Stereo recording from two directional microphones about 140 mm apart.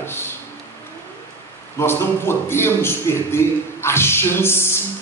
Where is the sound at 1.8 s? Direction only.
15° left (ahead or behind).